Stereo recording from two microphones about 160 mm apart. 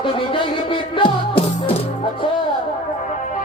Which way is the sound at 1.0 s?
35° left (ahead or behind).